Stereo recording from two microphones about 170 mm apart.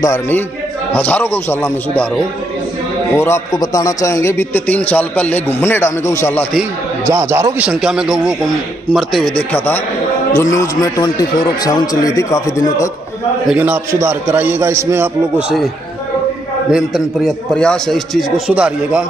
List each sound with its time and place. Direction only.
0.0 s a man's voice: 15° left (ahead or behind)
3.2 s a man's voice: 15° left (ahead or behind)
7.1 s a man's voice: 15° right (ahead or behind); by 9.8 s 5° left (ahead or behind)
10.3 s a man's voice: 20° left (ahead or behind)
13.5 s a man's voice: 10° right (ahead or behind)
16.7 s a man's voice: centre (ahead or behind)